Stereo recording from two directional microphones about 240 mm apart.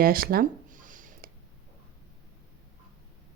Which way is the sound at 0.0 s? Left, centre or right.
Right.